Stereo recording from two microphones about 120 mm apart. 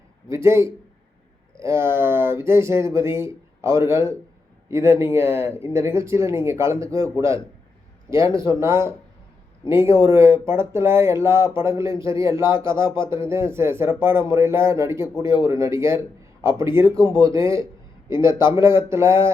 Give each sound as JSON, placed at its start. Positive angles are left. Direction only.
{"t": 0.3, "sound": "speech", "side_deg": -20}